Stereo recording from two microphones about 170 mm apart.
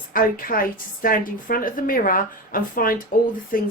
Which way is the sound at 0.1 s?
55° left (ahead or behind).